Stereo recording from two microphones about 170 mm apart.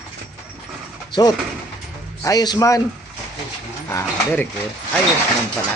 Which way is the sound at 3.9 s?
15° left (ahead or behind).